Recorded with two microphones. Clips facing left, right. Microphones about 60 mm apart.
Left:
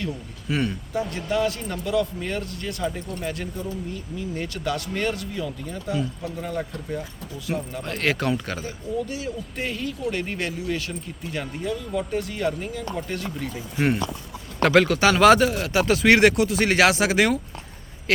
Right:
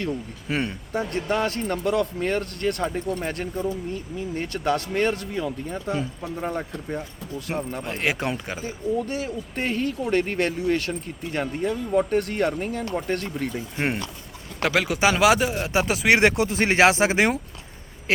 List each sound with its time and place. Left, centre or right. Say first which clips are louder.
0.0 s speech: right 3 dB; right
0.9 s speech: right 1 dB; right
7.8 s speech: left 2 dB; right
9.0 s speech: right 2 dB; right
14.6 s speech: left 4 dB; centre
15.6 s speech: left 2 dB; centre
16.2 s speech: left 2 dB; right